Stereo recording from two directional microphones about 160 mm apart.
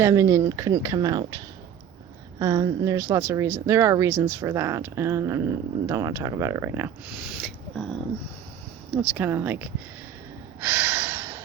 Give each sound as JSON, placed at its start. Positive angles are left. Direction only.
{"t": 0.0, "sound": "speech", "side_deg": -20}
{"t": 2.4, "sound": "a woman's voice", "side_deg": -20}
{"t": 7.4, "sound": "speech", "side_deg": 5}
{"t": 9.0, "sound": "a woman's voice", "side_deg": -10}
{"t": 10.6, "sound": "gasp", "side_deg": -10}